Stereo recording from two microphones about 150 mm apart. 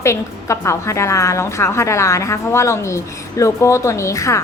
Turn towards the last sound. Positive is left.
turn(degrees=20)  # may be behind; listen again after turning